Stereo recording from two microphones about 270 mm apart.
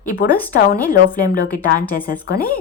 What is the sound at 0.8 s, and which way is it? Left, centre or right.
A woman's voice, left.